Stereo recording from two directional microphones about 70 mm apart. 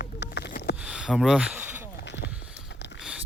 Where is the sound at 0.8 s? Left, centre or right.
Centre.